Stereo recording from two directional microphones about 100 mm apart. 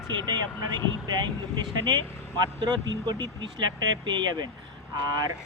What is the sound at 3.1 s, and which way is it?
Speech, 40° right (ahead or behind).